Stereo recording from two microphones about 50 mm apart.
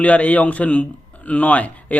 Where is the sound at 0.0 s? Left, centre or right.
Left.